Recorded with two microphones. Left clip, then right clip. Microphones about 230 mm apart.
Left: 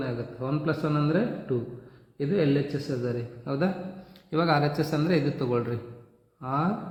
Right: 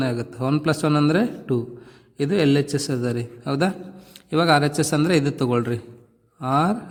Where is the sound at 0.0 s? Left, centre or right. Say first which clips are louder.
Right 7 dB; right.